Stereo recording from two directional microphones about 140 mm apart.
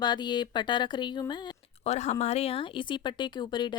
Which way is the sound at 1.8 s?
55° left (ahead or behind).